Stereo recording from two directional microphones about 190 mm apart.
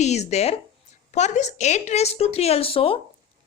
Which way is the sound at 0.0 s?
35° left (ahead or behind).